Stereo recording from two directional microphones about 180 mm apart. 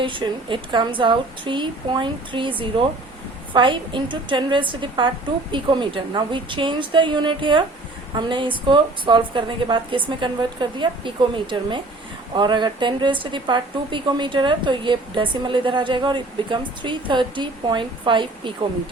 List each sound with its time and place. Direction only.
0.0 s a woman's voice: 25° right (ahead or behind)